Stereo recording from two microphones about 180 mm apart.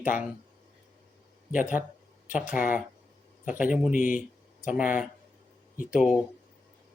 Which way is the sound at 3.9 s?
50° left (ahead or behind).